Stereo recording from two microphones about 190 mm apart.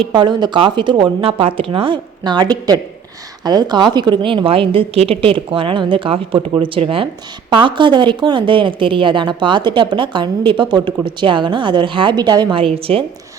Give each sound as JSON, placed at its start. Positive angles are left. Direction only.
{"t": 0.0, "sound": "a woman's voice", "side_deg": -25}